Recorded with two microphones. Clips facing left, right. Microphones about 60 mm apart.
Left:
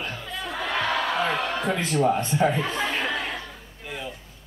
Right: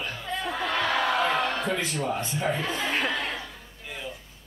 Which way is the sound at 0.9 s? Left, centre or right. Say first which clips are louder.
Right 1 dB; centre.